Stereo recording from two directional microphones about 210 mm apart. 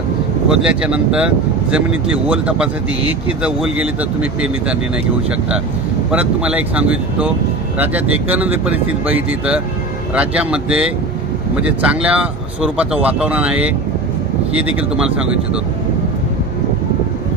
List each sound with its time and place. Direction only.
0.5 s speech: 5° right (ahead or behind)
6.1 s speech: 5° right (ahead or behind)
8.3 s speech: 5° right (ahead or behind)